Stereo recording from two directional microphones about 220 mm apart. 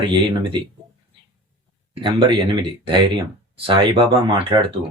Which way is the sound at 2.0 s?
20° right (ahead or behind).